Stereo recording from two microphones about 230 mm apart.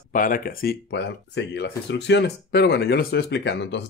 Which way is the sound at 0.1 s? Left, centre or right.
Left.